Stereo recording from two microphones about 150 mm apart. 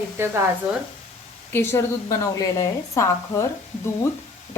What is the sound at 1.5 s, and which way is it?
A woman's voice, 15° left (ahead or behind).